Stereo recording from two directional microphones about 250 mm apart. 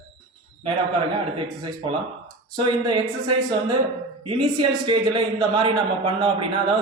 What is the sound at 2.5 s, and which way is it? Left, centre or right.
Speech, centre.